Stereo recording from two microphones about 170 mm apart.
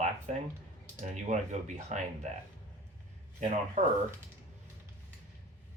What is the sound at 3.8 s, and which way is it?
Speech, 50° right (ahead or behind).